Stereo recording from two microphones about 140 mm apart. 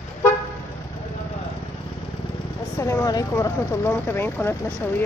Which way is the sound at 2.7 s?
20° left (ahead or behind).